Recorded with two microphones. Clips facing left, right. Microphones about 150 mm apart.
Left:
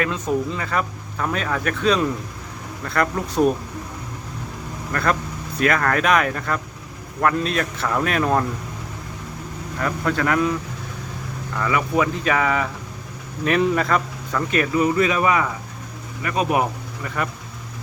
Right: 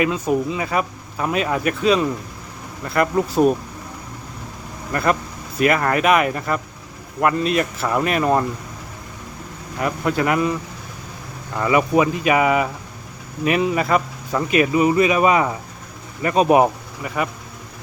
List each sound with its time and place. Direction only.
0.0 s speech: 10° right (ahead or behind)
4.9 s speech: 5° right (ahead or behind)
9.8 s speech: 15° right (ahead or behind)
11.5 s speech: 20° right (ahead or behind)